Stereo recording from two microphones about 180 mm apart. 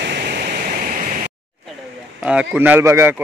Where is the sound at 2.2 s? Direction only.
5° right (ahead or behind).